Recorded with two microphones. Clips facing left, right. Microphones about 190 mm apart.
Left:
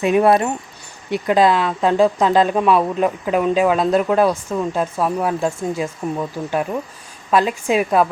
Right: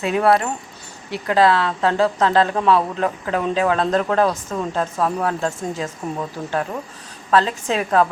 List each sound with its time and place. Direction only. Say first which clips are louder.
0.0 s speech: left 3 dB; 20° left (ahead or behind)